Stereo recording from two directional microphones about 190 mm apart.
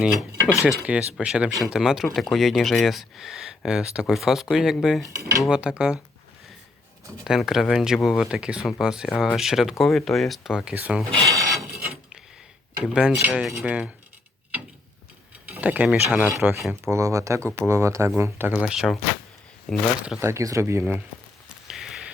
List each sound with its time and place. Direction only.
0.0 s cutlery: centre (ahead or behind)
0.9 s speech: 5° right (ahead or behind)
7.3 s speech: centre (ahead or behind)
11.1 s rub: 20° right (ahead or behind)
12.8 s speech: 5° right (ahead or behind)
15.4 s speech: 5° right (ahead or behind)
20.1 s speech: 15° right (ahead or behind)
21.5 s a sound: centre (ahead or behind)